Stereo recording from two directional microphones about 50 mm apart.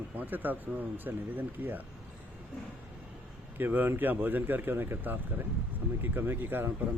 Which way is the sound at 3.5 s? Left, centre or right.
Right.